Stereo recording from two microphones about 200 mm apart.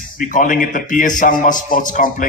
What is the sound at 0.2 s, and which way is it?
A man's voice, 40° left (ahead or behind).